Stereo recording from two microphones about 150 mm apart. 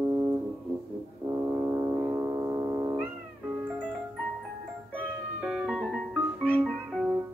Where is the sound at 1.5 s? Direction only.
25° right (ahead or behind).